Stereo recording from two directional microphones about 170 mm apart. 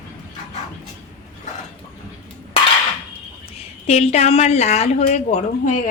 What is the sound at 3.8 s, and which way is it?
Speech, 40° left (ahead or behind).